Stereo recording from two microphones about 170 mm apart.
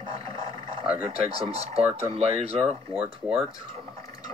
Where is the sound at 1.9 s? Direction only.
40° right (ahead or behind).